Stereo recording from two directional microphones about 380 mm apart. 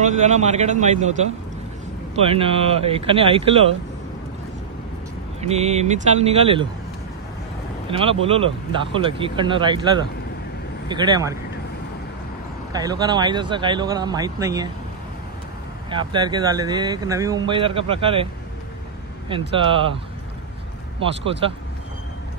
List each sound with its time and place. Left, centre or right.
0.0 s speech: centre
2.1 s speech: centre
5.4 s speech: centre
7.9 s speech: centre
12.7 s speech: centre
15.9 s speech: centre
19.5 s speech: centre
21.0 s speech: centre